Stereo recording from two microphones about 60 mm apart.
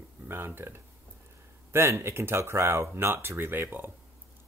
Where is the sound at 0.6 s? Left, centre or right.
Right.